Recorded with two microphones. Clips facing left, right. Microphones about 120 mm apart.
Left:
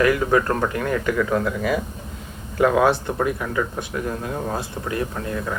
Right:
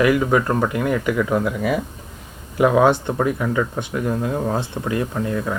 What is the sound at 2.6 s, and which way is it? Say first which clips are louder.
Speech: right 2 dB; 15° right (ahead or behind).